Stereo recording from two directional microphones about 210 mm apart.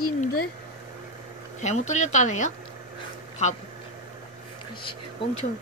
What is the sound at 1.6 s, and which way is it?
Speech, 35° left (ahead or behind).